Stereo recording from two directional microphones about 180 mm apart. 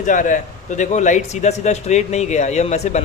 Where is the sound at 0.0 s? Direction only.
45° left (ahead or behind).